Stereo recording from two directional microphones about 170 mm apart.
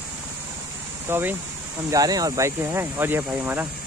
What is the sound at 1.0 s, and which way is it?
Speech, 15° right (ahead or behind).